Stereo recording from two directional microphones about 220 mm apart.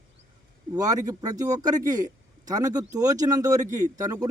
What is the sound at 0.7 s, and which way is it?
Speech, 15° right (ahead or behind).